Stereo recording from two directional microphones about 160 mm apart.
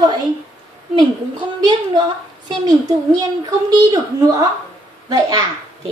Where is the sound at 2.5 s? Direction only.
25° right (ahead or behind).